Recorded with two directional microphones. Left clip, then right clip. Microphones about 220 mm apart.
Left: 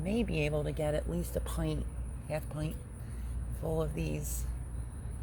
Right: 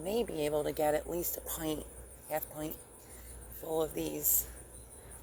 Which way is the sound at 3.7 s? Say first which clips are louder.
Right 3 dB; 35° right (ahead or behind).